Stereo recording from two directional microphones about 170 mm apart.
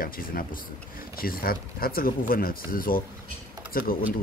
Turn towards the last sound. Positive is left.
turn(degrees=60)  # may be behind; listen again after turning